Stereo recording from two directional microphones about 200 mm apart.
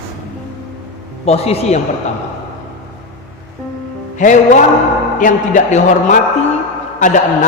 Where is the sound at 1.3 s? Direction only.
30° left (ahead or behind).